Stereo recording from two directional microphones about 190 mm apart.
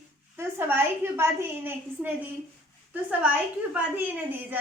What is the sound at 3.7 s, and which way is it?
Speech, 10° right (ahead or behind).